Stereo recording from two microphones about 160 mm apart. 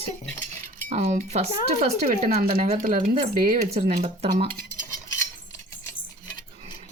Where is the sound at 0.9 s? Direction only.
50° right (ahead or behind).